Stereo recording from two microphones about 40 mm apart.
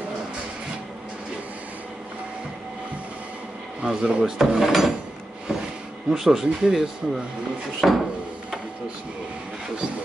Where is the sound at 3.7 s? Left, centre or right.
Right.